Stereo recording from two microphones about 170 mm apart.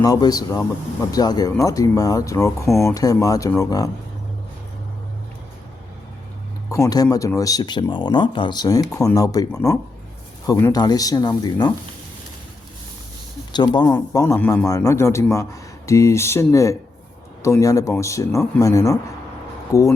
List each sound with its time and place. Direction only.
0.0 s speech: 20° left (ahead or behind)
6.7 s speech: 20° left (ahead or behind)
13.5 s speech: 25° left (ahead or behind)